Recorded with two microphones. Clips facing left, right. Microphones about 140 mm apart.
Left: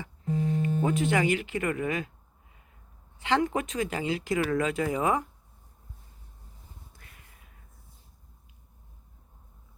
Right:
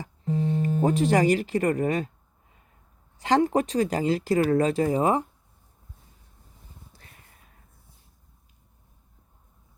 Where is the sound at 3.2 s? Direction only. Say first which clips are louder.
Right 5 dB; 35° right (ahead or behind).